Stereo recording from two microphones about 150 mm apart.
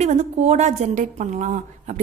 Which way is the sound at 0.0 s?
50° right (ahead or behind).